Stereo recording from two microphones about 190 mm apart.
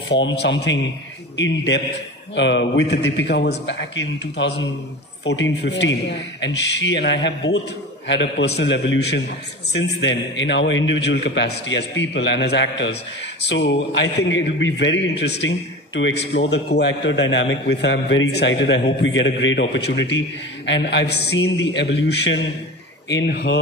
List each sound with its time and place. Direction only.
0.4 s a man's voice: 65° left (ahead or behind)